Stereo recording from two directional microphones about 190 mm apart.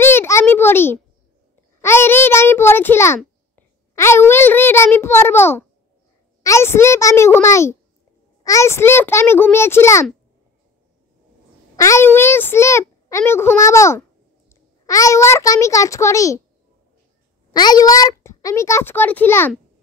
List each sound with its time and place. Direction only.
0.0 s a sound: 10° left (ahead or behind)
1.8 s a child's voice: 15° left (ahead or behind)
11.7 s a child's voice: 15° left (ahead or behind)
17.5 s a child's voice: 20° left (ahead or behind)